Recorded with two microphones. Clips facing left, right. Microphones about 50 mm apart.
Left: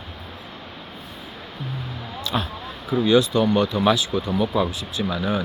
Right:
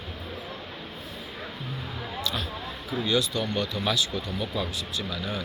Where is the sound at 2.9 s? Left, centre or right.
Left.